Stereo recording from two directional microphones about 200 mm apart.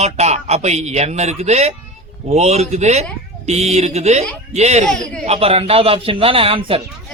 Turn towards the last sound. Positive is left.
turn(degrees=-25)  # may be behind; listen again after turning